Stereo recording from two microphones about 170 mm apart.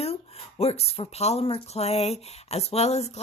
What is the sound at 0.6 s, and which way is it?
A woman's voice, 35° left (ahead or behind).